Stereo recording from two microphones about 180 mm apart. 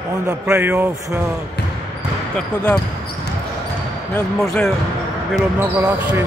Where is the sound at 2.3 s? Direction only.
10° left (ahead or behind).